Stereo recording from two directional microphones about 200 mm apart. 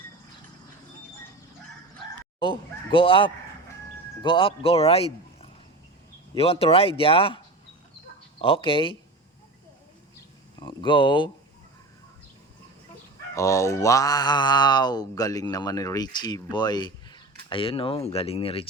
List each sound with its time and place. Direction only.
2.4 s mantra: 25° left (ahead or behind)
10.6 s speech: 25° left (ahead or behind)
13.3 s mantra: 15° left (ahead or behind)